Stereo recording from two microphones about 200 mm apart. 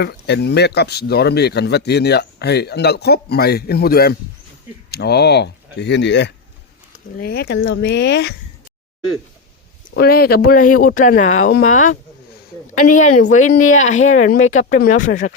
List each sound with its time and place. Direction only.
0.0 s speech: 55° left (ahead or behind)
7.2 s speech: 50° left (ahead or behind)
10.0 s speech: 50° left (ahead or behind)